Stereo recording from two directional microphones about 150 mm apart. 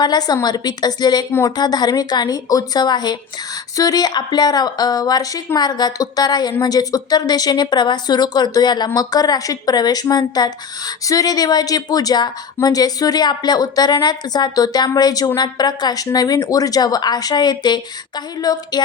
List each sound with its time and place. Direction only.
0.0 s speech: 25° left (ahead or behind)